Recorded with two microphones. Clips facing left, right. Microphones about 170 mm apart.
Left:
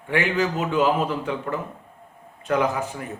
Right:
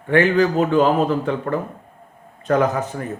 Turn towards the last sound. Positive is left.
turn(degrees=-40)  # may be behind; listen again after turning